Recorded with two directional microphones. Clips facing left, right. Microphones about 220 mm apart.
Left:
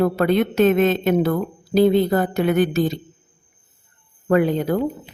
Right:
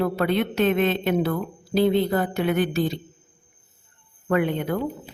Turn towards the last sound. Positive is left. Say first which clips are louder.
# left 5 dB
turn(degrees=35)  # may be behind; listen again after turning